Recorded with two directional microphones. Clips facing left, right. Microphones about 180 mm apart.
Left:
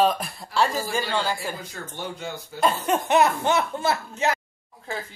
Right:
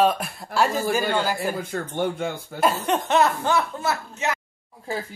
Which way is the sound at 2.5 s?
5° right (ahead or behind).